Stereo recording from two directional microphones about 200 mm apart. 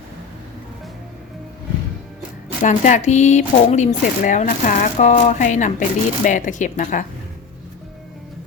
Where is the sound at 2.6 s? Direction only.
40° left (ahead or behind).